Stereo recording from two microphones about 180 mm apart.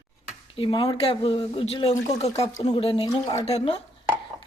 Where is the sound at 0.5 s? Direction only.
25° left (ahead or behind).